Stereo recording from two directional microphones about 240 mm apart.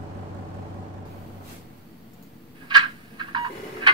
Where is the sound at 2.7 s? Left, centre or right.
Centre.